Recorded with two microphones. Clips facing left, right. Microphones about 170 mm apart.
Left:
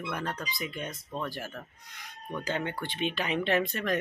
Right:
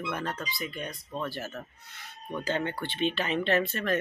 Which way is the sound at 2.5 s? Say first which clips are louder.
Right 2 dB; 10° left (ahead or behind).